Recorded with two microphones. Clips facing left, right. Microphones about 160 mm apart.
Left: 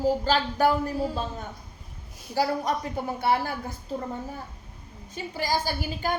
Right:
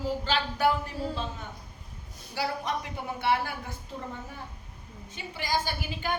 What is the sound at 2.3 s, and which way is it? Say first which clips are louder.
Speech: left 6 dB; 40° left (ahead or behind).